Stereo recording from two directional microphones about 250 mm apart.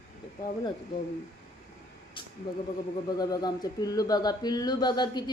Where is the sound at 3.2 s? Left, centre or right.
Centre.